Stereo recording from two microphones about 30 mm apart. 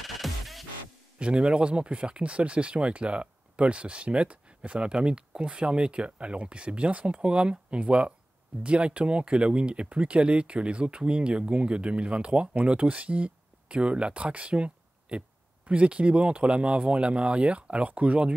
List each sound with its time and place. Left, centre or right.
0.0 s music: centre
1.2 s speech: right
7.2 s speech: right
12.9 s a sound: right
13.7 s speech: right